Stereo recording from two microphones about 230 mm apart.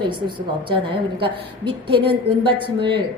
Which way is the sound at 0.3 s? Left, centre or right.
Right.